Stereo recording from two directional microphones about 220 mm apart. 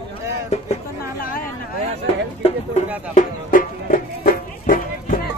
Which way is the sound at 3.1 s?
35° left (ahead or behind).